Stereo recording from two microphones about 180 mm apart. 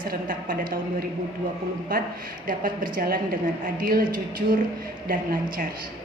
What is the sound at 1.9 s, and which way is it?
A woman's voice, 50° right (ahead or behind).